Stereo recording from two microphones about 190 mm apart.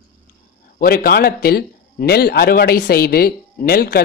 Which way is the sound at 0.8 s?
55° left (ahead or behind).